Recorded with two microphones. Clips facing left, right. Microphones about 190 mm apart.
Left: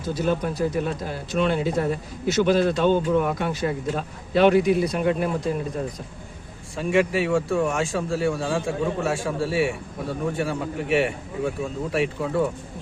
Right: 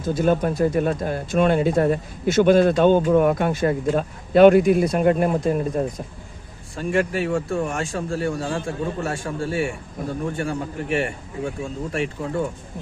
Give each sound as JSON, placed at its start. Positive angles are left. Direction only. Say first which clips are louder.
{"t": 0.0, "sound": "speech", "louder": "right 4 dB", "side_deg": -50}
{"t": 6.7, "sound": "speech", "louder": "left 1 dB", "side_deg": 0}